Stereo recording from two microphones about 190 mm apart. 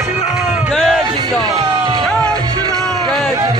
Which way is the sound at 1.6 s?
30° right (ahead or behind).